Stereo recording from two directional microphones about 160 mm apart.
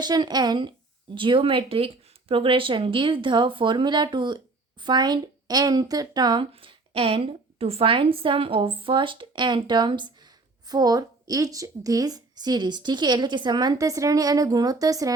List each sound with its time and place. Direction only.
0.0 s a woman's voice: 25° right (ahead or behind)